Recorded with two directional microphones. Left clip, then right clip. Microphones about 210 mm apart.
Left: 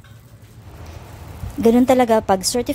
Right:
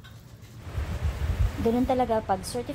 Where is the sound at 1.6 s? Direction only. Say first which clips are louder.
Left 11 dB; 50° left (ahead or behind).